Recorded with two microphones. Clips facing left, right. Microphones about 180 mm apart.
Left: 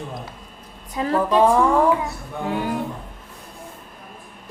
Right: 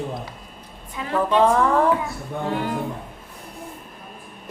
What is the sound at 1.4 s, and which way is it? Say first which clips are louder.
A woman's voice: left 2 dB; 15° left (ahead or behind).